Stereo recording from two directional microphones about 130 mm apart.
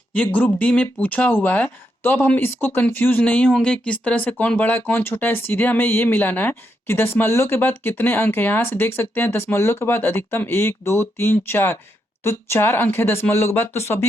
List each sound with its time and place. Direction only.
0.1 s speech: 10° left (ahead or behind)